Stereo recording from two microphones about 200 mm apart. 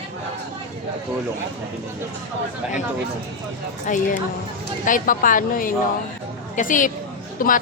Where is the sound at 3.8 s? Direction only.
40° left (ahead or behind).